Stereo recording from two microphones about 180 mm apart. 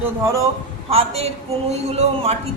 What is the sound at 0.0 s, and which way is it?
Speech, 15° right (ahead or behind).